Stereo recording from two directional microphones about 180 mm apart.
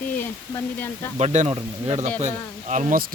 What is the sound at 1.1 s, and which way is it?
Speech, 40° right (ahead or behind).